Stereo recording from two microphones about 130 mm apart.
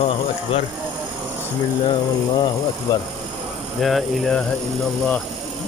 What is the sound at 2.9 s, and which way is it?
Mantra, 25° left (ahead or behind).